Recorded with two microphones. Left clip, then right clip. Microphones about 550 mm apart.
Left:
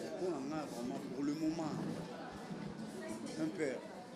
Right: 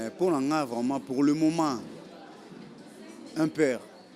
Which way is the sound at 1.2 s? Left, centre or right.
Right.